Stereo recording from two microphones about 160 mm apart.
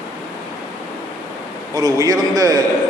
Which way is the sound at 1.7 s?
20° right (ahead or behind).